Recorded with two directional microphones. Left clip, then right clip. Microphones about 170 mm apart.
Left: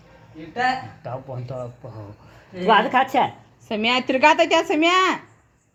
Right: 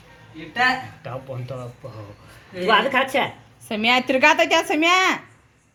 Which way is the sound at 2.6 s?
65° left (ahead or behind).